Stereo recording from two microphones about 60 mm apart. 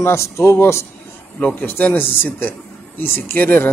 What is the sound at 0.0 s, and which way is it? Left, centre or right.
Speech, left.